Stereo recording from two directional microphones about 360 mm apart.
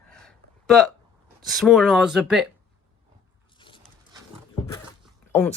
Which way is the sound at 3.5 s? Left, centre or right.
Centre.